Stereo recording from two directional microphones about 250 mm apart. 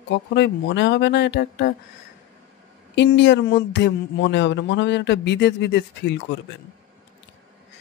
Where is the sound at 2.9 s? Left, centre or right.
Left.